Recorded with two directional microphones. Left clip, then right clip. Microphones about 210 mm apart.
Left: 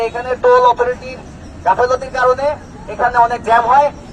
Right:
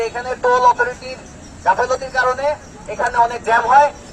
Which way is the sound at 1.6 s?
5° left (ahead or behind).